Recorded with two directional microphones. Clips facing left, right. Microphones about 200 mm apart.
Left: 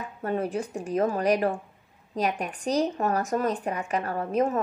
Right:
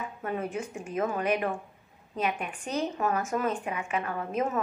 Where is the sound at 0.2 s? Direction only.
35° left (ahead or behind).